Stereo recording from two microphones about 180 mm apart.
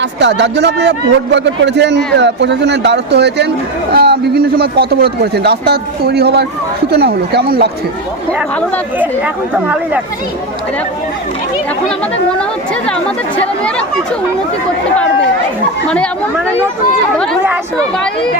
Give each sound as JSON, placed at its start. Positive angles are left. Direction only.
{"t": 0.0, "sound": "speech", "side_deg": -75}
{"t": 9.0, "sound": "speech", "side_deg": -10}
{"t": 12.4, "sound": "speech", "side_deg": 5}
{"t": 17.4, "sound": "chatter", "side_deg": -10}